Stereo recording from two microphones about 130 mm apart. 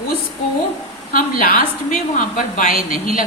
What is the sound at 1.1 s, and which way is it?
A woman's voice, 90° left.